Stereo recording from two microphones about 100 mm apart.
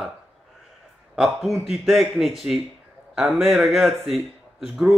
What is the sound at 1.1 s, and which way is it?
A man's voice, 5° right (ahead or behind).